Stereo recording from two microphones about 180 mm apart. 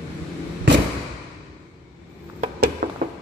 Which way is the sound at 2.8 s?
45° right (ahead or behind).